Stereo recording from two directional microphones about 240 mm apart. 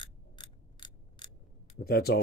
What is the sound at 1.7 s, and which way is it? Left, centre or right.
Speech, left.